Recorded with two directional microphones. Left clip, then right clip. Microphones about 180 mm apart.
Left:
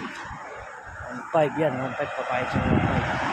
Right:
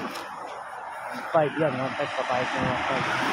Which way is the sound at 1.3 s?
25° left (ahead or behind).